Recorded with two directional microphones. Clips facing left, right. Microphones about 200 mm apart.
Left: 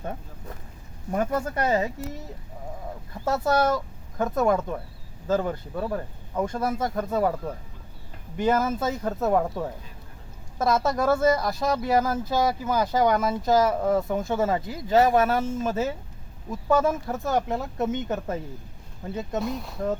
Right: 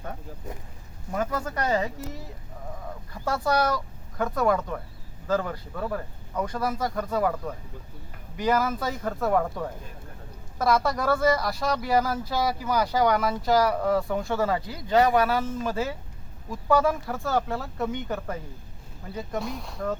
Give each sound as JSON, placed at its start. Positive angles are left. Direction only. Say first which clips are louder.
{"t": 1.1, "sound": "speech", "louder": "left 3 dB", "side_deg": 25}
{"t": 3.2, "sound": "speech", "louder": "left 2 dB", "side_deg": 20}
{"t": 19.5, "sound": "speech", "louder": "left 3 dB", "side_deg": 0}